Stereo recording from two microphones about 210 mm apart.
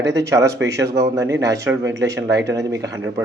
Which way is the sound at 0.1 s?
15° right (ahead or behind).